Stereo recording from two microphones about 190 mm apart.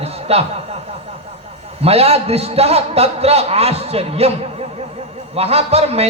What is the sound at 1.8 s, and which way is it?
A man's voice, 30° right (ahead or behind).